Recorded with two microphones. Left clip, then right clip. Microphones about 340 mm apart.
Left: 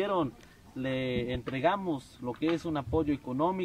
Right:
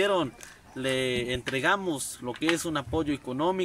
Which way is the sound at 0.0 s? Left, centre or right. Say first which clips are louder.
Right 4 dB; centre.